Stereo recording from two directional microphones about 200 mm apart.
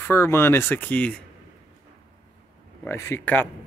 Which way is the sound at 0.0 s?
10° left (ahead or behind).